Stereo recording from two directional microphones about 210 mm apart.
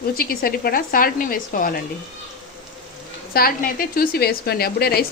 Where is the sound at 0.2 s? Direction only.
45° left (ahead or behind).